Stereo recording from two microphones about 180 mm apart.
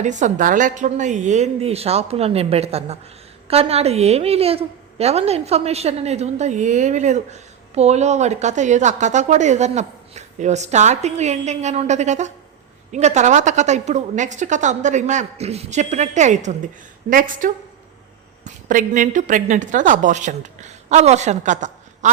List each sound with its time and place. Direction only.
0.0 s a woman's voice: 40° right (ahead or behind)